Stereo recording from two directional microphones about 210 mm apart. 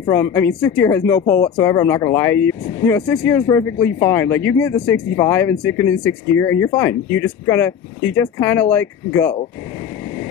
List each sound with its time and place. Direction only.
0.0 s speech: 15° left (ahead or behind)